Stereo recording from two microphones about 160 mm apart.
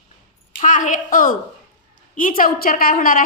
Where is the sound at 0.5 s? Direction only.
55° left (ahead or behind).